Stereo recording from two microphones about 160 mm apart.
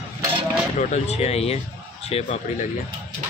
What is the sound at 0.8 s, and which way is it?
Speech, 45° left (ahead or behind).